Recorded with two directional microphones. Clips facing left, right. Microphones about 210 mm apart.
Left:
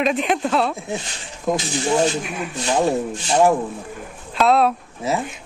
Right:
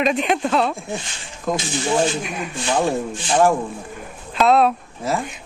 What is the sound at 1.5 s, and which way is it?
Speech, 25° left (ahead or behind).